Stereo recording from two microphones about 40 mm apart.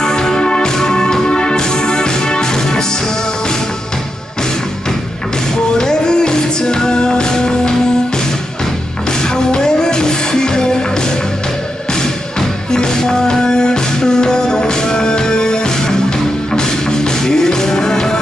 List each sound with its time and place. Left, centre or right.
0.0 s music: centre
5.8 s music: centre
9.2 s music: centre